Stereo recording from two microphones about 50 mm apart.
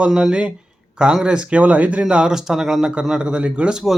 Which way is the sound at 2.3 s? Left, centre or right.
Centre.